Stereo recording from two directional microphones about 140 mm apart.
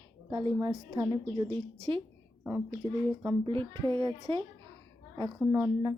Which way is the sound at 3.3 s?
40° right (ahead or behind).